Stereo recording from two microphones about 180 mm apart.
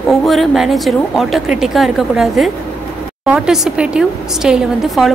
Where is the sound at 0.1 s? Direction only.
Centre (ahead or behind).